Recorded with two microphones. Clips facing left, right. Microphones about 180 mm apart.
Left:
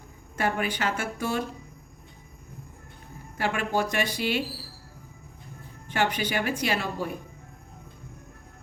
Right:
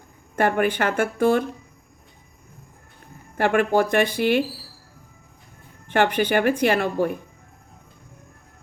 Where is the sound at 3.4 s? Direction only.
55° right (ahead or behind).